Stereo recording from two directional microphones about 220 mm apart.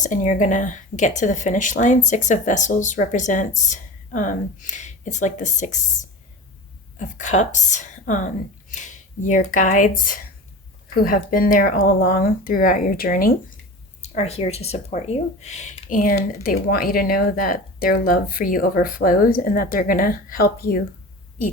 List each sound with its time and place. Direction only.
0.0 s speech: 35° left (ahead or behind)
14.0 s speech: 30° left (ahead or behind)